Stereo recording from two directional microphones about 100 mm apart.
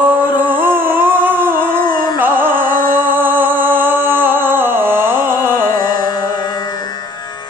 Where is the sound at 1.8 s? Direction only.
45° left (ahead or behind).